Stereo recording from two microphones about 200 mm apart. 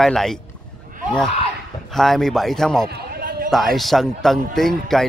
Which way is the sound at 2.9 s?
45° right (ahead or behind).